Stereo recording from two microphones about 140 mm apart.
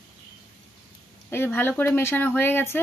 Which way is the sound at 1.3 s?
15° left (ahead or behind).